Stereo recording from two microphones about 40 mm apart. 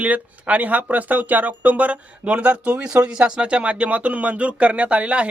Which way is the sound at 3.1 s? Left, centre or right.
Right.